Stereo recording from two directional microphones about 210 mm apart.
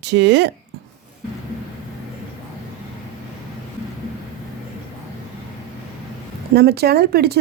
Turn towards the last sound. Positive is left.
turn(degrees=-50)  # may be behind; listen again after turning